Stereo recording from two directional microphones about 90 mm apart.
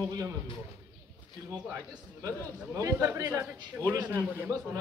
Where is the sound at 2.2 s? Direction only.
35° right (ahead or behind).